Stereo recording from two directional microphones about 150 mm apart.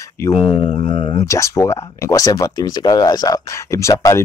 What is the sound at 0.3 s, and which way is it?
Speech, 35° left (ahead or behind).